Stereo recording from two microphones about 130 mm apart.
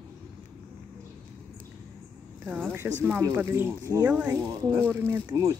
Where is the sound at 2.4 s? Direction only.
15° right (ahead or behind).